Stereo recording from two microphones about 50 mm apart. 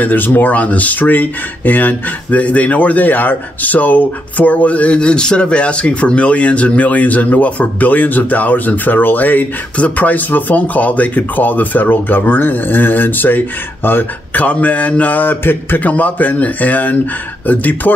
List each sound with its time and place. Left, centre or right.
0.0 s speech: left